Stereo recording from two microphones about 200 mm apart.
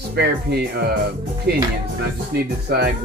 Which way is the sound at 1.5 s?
55° right (ahead or behind).